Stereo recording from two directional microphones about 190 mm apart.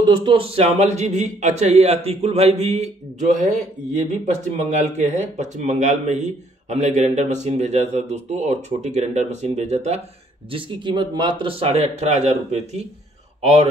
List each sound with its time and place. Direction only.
0.0 s a man's voice: 25° right (ahead or behind)